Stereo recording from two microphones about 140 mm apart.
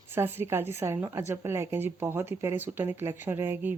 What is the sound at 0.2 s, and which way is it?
Speech, 15° right (ahead or behind).